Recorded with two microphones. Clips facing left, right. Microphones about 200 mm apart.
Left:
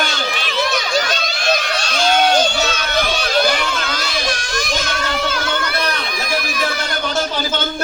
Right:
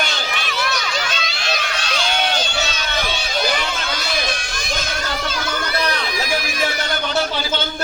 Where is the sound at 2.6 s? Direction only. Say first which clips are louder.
Left 4 dB; 55° left (ahead or behind).